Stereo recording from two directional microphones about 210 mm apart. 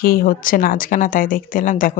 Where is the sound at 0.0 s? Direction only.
45° left (ahead or behind).